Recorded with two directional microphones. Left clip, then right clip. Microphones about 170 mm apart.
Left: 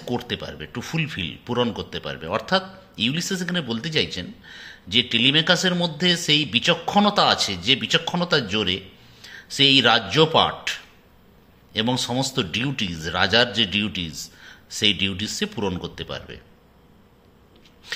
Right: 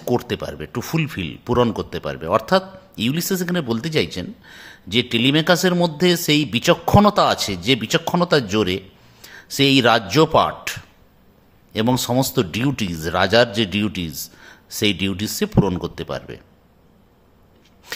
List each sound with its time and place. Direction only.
0.0 s speech: 60° right (ahead or behind)
17.9 s chopping: 55° right (ahead or behind)